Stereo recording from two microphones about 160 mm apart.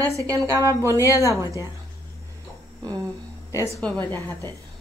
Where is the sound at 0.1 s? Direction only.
20° right (ahead or behind).